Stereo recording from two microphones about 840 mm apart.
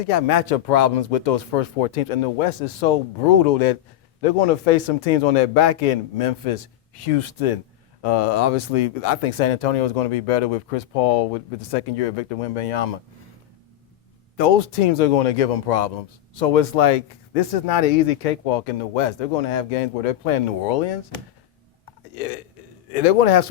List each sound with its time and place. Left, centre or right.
0.1 s a man's voice: left
8.0 s a man's voice: left
14.3 s a man's voice: left
22.1 s burping: left
22.9 s a man's voice: left